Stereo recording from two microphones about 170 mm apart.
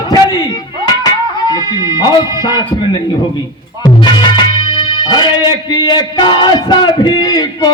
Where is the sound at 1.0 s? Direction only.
25° left (ahead or behind).